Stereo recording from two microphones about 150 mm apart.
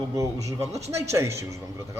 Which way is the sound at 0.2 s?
20° right (ahead or behind).